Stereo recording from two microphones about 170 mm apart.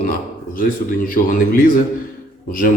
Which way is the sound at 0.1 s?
55° left (ahead or behind).